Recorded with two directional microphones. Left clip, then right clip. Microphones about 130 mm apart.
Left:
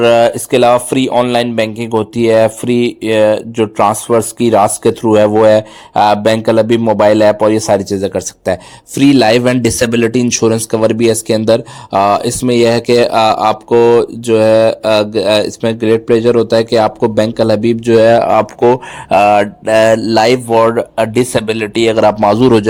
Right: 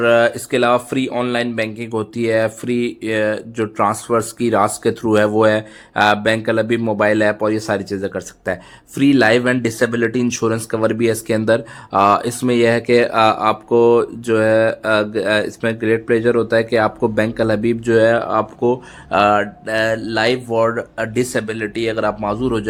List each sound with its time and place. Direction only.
0.0 s speech: 30° left (ahead or behind)
18.1 s speech: 45° left (ahead or behind)
20.5 s speech: 30° left (ahead or behind)
21.9 s a man's voice: 60° left (ahead or behind)